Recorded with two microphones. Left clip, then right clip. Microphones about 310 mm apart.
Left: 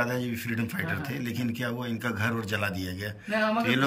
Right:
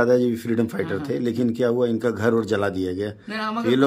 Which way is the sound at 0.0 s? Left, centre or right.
Centre.